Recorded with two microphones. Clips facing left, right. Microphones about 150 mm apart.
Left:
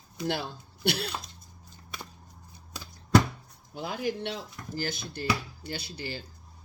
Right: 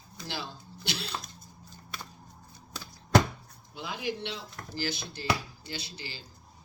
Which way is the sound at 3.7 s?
45° left (ahead or behind).